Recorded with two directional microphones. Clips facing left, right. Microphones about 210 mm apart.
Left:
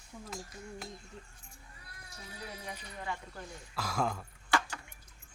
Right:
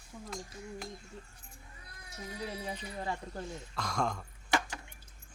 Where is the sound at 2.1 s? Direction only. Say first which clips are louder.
Right 6 dB; 30° right (ahead or behind).